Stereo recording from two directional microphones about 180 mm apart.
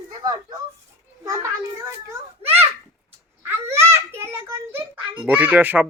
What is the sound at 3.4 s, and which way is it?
A child's voice, 15° right (ahead or behind).